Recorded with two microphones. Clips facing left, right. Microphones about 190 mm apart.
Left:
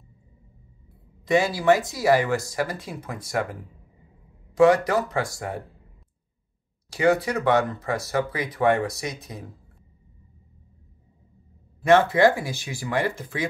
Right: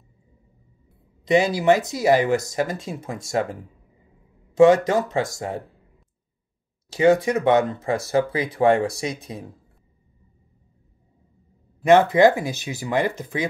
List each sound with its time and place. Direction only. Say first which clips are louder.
1.2 s speech: right 2 dB; 20° right (ahead or behind)
4.6 s speech: right 3 dB; 25° right (ahead or behind)
6.9 s speech: right 4 dB; 25° right (ahead or behind)
11.8 s speech: right 3 dB; 20° right (ahead or behind)